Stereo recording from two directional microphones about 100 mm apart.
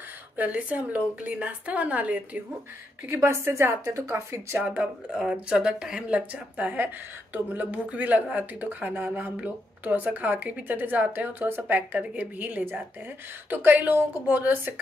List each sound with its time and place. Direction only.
0.4 s speech: 15° right (ahead or behind)
3.1 s a woman's voice: 25° right (ahead or behind)
4.6 s a woman's voice: 10° right (ahead or behind)